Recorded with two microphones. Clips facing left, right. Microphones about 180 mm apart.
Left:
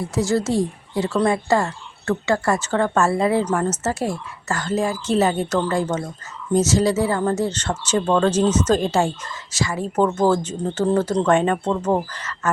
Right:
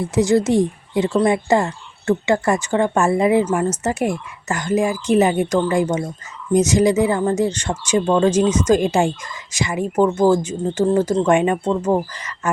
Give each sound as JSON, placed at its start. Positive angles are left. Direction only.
{"t": 0.0, "sound": "speech", "side_deg": -20}